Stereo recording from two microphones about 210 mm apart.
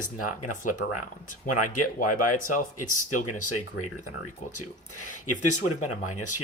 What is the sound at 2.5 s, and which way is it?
Speech, 40° left (ahead or behind).